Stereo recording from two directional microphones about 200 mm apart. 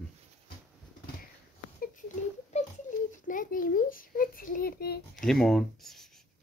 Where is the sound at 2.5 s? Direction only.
35° left (ahead or behind); by 5.0 s 50° left (ahead or behind).